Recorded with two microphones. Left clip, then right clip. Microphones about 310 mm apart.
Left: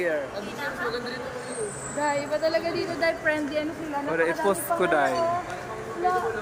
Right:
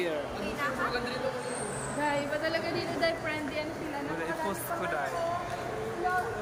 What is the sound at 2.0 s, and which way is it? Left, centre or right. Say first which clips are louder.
A woman's voice: left 6 dB; centre.